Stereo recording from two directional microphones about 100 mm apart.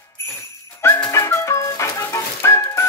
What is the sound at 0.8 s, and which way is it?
Music, 30° left (ahead or behind).